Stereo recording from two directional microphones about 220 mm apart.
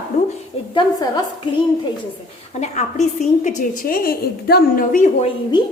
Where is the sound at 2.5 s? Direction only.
30° left (ahead or behind).